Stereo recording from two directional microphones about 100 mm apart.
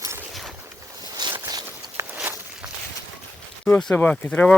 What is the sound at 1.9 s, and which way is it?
Walk, 20° right (ahead or behind).